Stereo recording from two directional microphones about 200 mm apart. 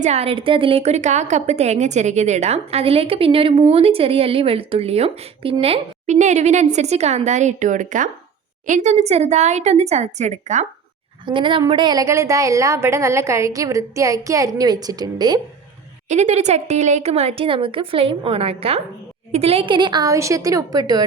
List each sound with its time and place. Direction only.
0.0 s a woman's voice: 30° right (ahead or behind)
11.3 s a woman's voice: 25° right (ahead or behind)
16.0 s speech: 35° right (ahead or behind); by 21.0 s 20° right (ahead or behind)